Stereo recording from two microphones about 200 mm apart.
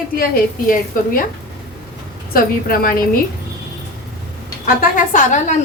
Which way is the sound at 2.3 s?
45° left (ahead or behind).